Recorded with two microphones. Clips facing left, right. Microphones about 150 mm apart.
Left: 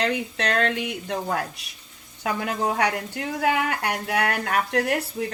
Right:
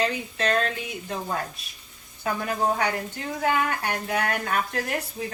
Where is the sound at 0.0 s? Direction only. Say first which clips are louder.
Left 1 dB; 70° left (ahead or behind).